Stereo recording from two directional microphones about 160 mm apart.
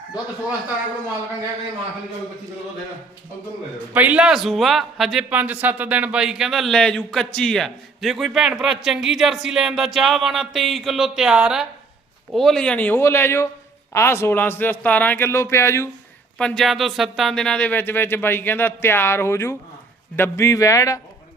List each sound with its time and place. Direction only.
3.9 s a man's voice: 10° right (ahead or behind); by 15.9 s 15° left (ahead or behind)
16.4 s a man's voice: 5° left (ahead or behind); by 21.0 s 20° left (ahead or behind)